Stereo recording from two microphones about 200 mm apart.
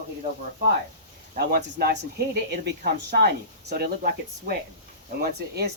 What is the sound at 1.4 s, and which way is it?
Speech, 50° right (ahead or behind).